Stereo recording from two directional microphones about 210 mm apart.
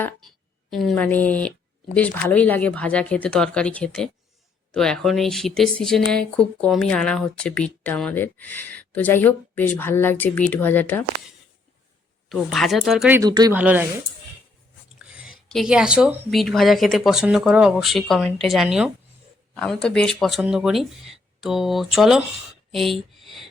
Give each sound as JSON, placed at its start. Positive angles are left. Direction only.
{"t": 0.7, "sound": "speech", "side_deg": 0}
{"t": 12.3, "sound": "speech", "side_deg": 0}
{"t": 13.2, "sound": "speech", "side_deg": -20}
{"t": 13.6, "sound": "speech", "side_deg": -5}
{"t": 15.1, "sound": "speech", "side_deg": -5}